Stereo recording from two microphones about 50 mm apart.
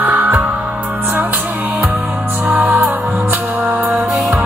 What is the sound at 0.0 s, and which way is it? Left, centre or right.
Music, right.